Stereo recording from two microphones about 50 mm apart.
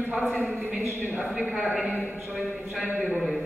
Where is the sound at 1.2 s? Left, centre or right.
Centre.